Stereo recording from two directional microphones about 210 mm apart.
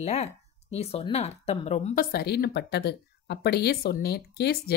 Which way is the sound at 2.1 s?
50° left (ahead or behind).